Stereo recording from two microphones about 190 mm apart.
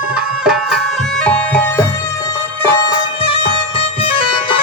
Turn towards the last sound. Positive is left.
turn(degrees=30)  # may be behind; listen again after turning